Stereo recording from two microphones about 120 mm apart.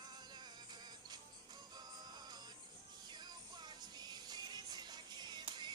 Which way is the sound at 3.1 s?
35° right (ahead or behind).